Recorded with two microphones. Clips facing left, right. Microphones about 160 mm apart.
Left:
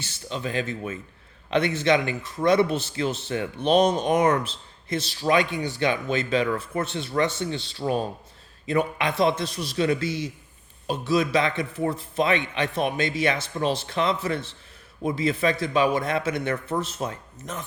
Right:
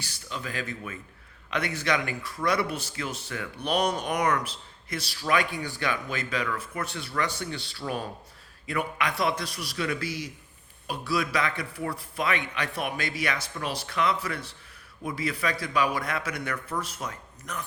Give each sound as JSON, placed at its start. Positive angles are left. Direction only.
{"t": 0.0, "sound": "speech", "side_deg": 25}